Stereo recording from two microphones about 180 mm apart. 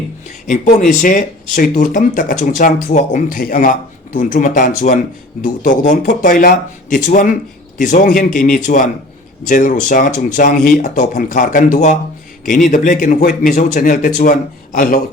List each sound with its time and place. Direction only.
0.4 s speech: 45° left (ahead or behind)